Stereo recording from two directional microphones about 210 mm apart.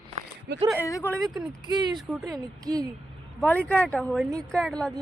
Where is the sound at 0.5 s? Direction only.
55° right (ahead or behind).